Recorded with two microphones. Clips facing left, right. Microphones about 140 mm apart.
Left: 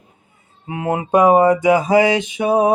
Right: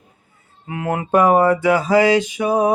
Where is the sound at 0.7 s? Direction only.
20° left (ahead or behind).